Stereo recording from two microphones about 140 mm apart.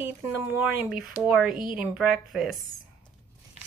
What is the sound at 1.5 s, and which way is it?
Speech, 80° right.